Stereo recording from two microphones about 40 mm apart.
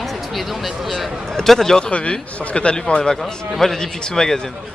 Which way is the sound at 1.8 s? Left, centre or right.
Left.